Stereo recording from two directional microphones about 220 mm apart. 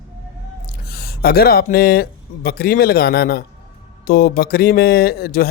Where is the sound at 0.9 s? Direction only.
45° left (ahead or behind).